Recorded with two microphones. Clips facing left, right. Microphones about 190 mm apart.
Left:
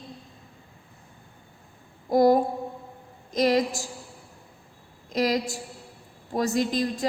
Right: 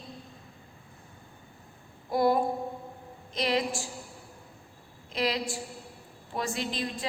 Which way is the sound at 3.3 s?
45° left (ahead or behind).